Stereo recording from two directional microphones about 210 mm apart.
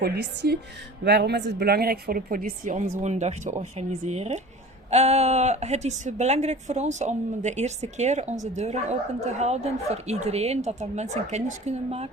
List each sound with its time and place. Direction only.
0.0 s a woman's voice: 50° right (ahead or behind); by 12.0 s 30° right (ahead or behind)